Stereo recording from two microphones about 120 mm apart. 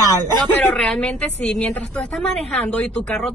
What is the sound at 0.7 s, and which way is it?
A woman's voice, 5° left (ahead or behind).